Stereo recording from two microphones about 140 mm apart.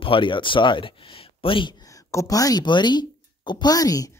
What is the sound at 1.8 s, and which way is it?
Speech, 20° left (ahead or behind).